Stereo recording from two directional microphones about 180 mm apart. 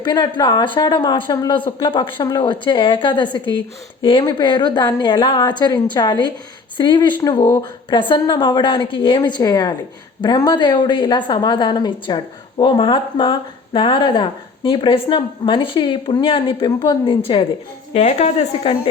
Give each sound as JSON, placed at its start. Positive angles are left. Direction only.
{"t": 0.0, "sound": "a woman's voice", "side_deg": 25}